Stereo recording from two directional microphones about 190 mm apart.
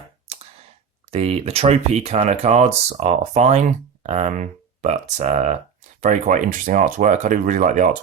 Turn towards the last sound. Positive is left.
turn(degrees=-40)  # may be behind; listen again after turning